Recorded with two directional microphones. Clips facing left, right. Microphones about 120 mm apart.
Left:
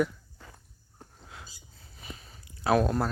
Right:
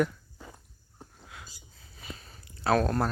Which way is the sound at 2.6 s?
15° left (ahead or behind).